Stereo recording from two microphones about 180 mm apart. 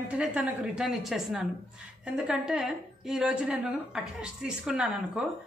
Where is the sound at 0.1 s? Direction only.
10° right (ahead or behind).